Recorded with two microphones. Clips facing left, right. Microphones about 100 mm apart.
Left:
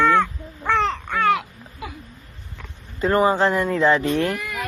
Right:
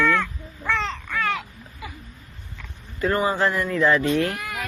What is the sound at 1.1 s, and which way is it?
Babbling, 35° left (ahead or behind).